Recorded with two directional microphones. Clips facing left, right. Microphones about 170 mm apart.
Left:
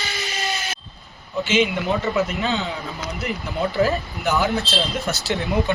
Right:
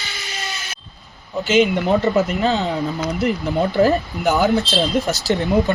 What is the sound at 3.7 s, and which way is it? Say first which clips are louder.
Speech: right 4 dB; 40° right (ahead or behind).